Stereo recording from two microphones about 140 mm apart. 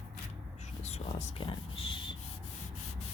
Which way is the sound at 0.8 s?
55° left (ahead or behind).